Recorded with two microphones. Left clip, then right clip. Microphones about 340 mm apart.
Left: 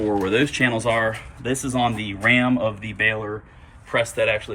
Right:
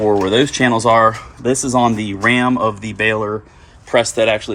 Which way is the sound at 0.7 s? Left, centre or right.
Right.